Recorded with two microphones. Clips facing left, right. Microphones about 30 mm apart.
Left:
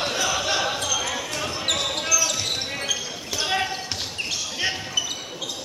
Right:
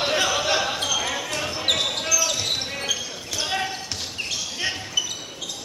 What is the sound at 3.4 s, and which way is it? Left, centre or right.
Basketball bounce, centre.